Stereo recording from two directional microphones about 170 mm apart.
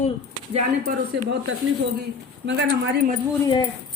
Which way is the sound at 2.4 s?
65° right (ahead or behind).